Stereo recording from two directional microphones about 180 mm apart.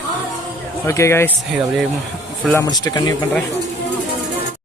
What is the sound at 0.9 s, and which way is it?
Speech, 15° left (ahead or behind).